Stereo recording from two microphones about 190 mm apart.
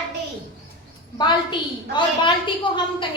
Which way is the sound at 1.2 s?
25° left (ahead or behind).